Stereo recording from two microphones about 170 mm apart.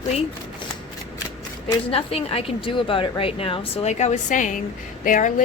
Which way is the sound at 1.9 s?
35° left (ahead or behind).